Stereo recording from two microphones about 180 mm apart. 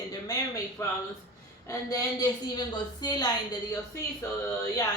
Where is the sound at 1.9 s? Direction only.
20° left (ahead or behind).